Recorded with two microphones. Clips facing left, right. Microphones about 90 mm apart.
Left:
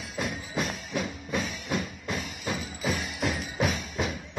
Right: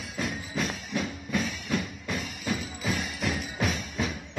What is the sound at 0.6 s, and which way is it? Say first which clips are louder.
Music: even; 15° left (ahead or behind).